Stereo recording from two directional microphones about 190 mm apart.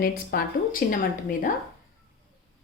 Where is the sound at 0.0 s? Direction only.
50° left (ahead or behind).